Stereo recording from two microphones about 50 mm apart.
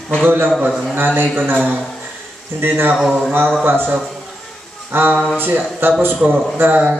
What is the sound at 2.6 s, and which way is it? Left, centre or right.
Speech, right.